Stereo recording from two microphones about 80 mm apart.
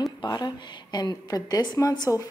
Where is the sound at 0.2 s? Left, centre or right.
Left.